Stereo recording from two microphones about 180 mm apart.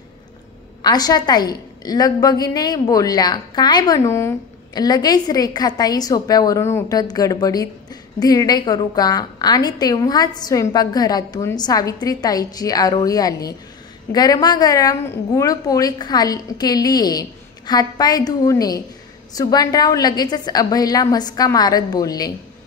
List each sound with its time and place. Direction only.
0.8 s a woman's voice: 20° left (ahead or behind)